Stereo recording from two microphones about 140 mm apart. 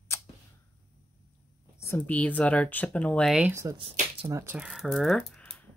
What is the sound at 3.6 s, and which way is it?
Speech, 25° right (ahead or behind).